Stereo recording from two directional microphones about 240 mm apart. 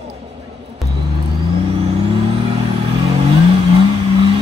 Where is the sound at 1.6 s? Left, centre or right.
Right.